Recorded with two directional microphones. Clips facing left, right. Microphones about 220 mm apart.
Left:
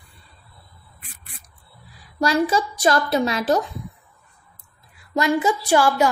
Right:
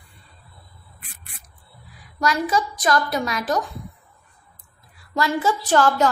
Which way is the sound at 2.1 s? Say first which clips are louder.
Left 3 dB; 30° left (ahead or behind).